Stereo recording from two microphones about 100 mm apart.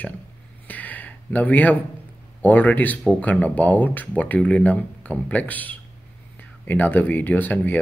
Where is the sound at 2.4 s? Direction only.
15° left (ahead or behind).